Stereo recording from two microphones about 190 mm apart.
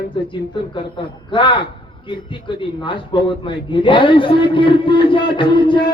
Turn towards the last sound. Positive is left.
turn(degrees=25)  # may be behind; listen again after turning